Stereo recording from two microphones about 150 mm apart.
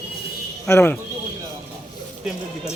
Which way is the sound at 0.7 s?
15° left (ahead or behind).